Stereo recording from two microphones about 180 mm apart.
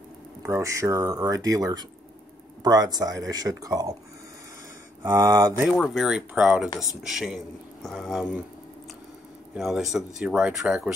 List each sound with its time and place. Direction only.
0.4 s speech: 15° right (ahead or behind)
5.0 s speech: 20° right (ahead or behind)
5.6 s speech: centre (ahead or behind)
9.5 s speech: centre (ahead or behind)